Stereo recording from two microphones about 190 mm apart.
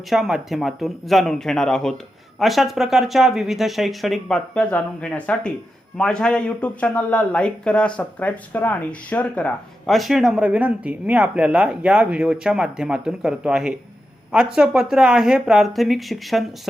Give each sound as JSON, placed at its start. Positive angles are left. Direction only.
{"t": 0.1, "sound": "speech", "side_deg": 0}